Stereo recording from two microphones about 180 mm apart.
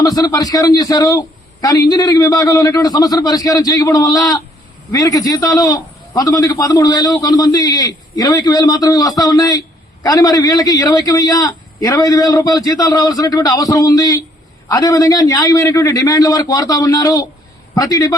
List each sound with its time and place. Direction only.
0.0 s a man's voice: 20° left (ahead or behind)